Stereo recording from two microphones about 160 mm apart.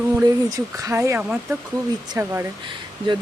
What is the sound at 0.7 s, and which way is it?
Speech, 20° right (ahead or behind).